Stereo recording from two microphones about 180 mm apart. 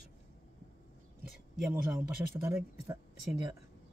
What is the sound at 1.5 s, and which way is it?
Speech, 5° right (ahead or behind).